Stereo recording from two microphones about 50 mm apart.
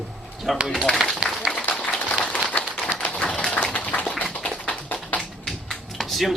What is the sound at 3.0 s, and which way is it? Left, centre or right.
Tap, centre.